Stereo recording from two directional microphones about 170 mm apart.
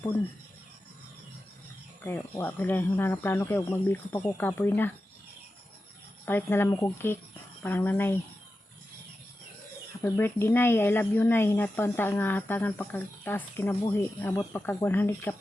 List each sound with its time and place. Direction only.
2.0 s speech: 15° left (ahead or behind)
6.2 s speech: 15° left (ahead or behind)
10.0 s speech: 15° left (ahead or behind)